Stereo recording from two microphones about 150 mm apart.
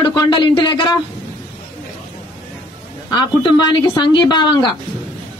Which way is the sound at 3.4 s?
30° left (ahead or behind).